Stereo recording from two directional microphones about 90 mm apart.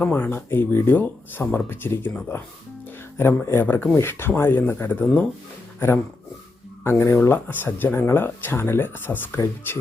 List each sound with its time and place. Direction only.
0.0 s speech: 20° left (ahead or behind)
3.2 s speech: 25° left (ahead or behind)
6.8 s speech: 30° left (ahead or behind)